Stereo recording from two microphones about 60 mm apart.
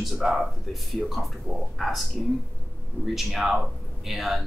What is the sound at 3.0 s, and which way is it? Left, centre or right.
Speech, centre.